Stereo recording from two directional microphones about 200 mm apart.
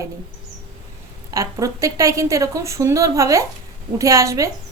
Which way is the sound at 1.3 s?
15° right (ahead or behind).